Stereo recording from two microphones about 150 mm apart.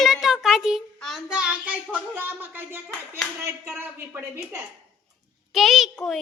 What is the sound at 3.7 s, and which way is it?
Speech, 15° right (ahead or behind).